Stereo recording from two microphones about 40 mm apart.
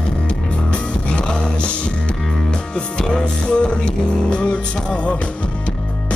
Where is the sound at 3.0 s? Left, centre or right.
Left.